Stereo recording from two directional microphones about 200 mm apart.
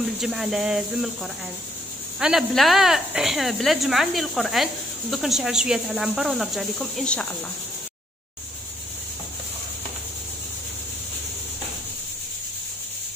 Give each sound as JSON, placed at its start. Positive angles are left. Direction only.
{"t": 0.2, "sound": "speech", "side_deg": 0}